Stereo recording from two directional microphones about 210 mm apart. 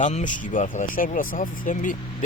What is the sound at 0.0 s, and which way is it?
Speech, 35° left (ahead or behind).